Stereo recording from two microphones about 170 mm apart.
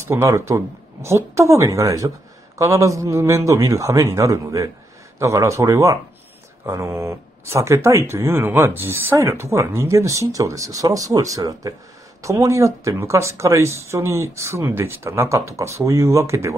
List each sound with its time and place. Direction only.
0.0 s speech: 15° right (ahead or behind)